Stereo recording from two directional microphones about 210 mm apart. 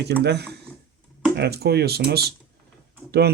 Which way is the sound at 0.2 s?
50° right (ahead or behind).